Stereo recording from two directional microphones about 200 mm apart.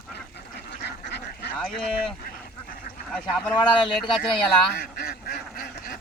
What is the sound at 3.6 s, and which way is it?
Speech, 25° left (ahead or behind).